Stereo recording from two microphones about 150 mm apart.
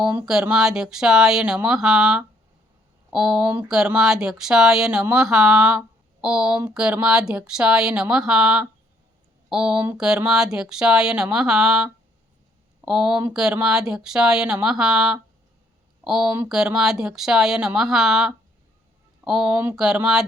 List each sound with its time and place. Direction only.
0.0 s speech: 5° right (ahead or behind)